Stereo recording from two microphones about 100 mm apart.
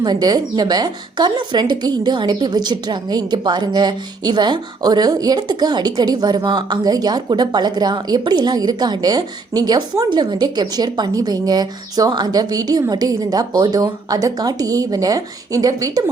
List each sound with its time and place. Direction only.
0.0 s a woman's voice: 40° right (ahead or behind)